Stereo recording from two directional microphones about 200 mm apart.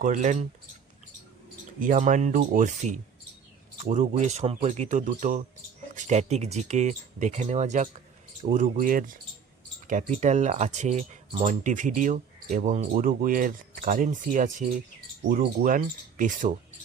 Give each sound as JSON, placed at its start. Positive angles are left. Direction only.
{"t": 0.0, "sound": "speech", "side_deg": -40}
{"t": 1.8, "sound": "speech", "side_deg": -40}